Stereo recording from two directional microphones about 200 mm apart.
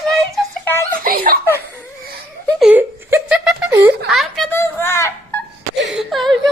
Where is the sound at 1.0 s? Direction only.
45° right (ahead or behind).